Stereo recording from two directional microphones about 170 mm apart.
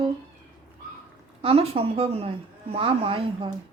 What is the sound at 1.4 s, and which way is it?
Speech, 35° right (ahead or behind).